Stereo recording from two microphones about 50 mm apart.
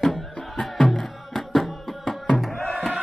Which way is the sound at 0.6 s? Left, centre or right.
Centre.